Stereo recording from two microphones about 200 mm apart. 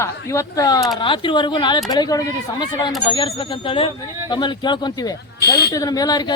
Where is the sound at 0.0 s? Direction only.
15° left (ahead or behind).